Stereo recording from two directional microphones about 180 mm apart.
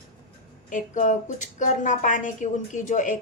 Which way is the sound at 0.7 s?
45° left (ahead or behind).